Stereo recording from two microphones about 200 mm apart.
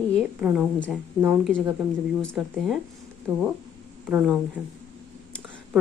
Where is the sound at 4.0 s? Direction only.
5° right (ahead or behind).